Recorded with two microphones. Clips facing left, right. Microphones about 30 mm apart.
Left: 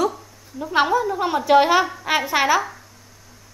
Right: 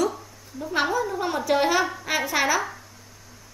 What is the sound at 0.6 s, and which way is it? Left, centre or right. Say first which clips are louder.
A woman's voice: left 5 dB; left.